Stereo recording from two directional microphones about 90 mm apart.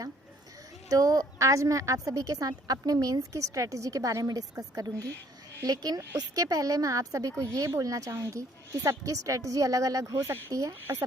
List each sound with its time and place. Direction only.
0.9 s a woman's voice: 40° right (ahead or behind)